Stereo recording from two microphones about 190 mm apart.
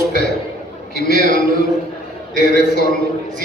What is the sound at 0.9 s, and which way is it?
Speech, 55° left (ahead or behind).